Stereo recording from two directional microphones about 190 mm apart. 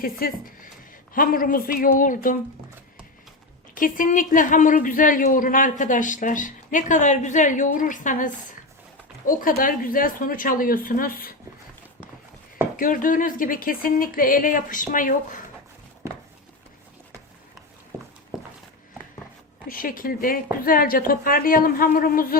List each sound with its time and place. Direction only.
0.0 s a man's voice: 50° left (ahead or behind)
3.8 s a man's voice: 45° left (ahead or behind)
12.7 s a man's voice: 45° left (ahead or behind)
17.9 s a sound: 15° right (ahead or behind)
19.6 s a man's voice: 45° left (ahead or behind)